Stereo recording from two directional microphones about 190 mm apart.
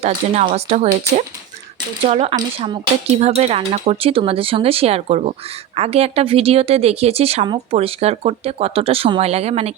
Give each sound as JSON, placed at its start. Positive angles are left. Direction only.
{"t": 0.0, "sound": "speech", "side_deg": -35}
{"t": 2.0, "sound": "speech", "side_deg": -35}